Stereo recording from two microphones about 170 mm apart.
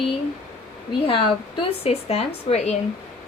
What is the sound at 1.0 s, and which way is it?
A woman's voice, 30° left (ahead or behind).